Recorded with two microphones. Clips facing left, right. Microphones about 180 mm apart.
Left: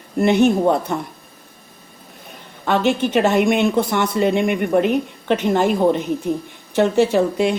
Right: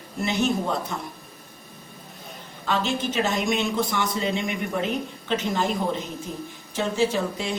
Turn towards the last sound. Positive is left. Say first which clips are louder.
# left 8 dB
turn(degrees=60)  # may be behind; listen again after turning